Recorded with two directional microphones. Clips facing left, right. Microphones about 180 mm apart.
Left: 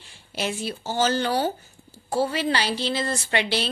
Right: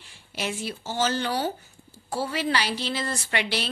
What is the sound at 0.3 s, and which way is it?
A woman's voice, 30° left (ahead or behind).